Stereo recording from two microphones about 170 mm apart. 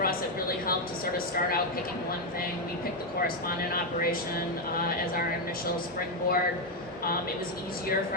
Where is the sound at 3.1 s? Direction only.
60° left (ahead or behind).